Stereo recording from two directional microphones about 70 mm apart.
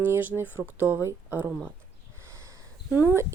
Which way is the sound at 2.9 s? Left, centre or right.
Right.